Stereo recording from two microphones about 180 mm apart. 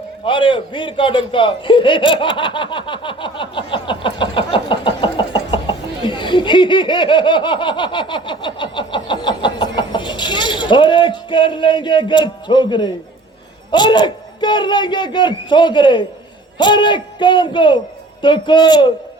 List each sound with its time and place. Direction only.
0.3 s chuckle: 30° left (ahead or behind)
13.7 s a man's voice: 25° left (ahead or behind)